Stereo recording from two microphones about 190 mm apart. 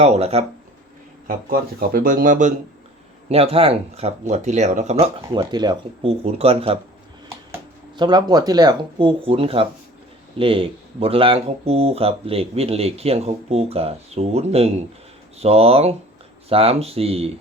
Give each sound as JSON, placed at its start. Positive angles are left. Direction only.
{"t": 0.0, "sound": "speech", "side_deg": -35}
{"t": 1.3, "sound": "speech", "side_deg": -50}
{"t": 3.2, "sound": "speech", "side_deg": -30}
{"t": 5.3, "sound": "speech", "side_deg": -25}
{"t": 7.3, "sound": "speech", "side_deg": -20}